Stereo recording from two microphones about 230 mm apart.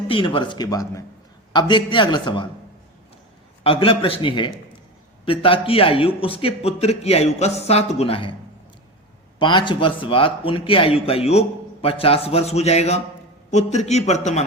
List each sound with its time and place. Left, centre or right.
0.1 s a man's voice: left
3.6 s a man's voice: left
9.4 s a man's voice: left